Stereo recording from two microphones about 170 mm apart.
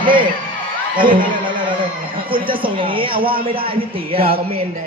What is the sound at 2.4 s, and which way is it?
Speech, 30° right (ahead or behind).